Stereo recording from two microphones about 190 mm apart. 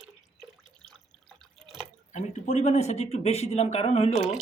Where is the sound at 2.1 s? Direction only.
40° left (ahead or behind).